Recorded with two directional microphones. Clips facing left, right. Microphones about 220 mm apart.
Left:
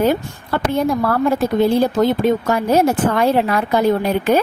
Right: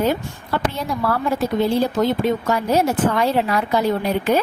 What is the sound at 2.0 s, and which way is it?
A woman's voice, 50° left (ahead or behind).